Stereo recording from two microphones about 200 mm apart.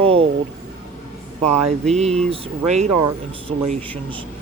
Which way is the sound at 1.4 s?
35° right (ahead or behind).